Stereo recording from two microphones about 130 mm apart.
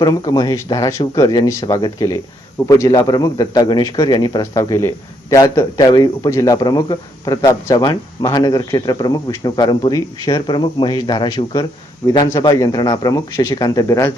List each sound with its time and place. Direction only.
0.0 s a man's voice: 30° left (ahead or behind)